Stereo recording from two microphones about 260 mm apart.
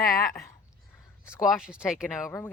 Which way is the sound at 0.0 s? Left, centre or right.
Left.